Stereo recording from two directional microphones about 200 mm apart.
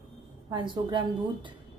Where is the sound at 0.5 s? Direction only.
25° right (ahead or behind).